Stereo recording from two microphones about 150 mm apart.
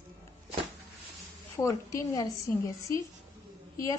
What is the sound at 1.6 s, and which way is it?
A woman's voice, 20° left (ahead or behind).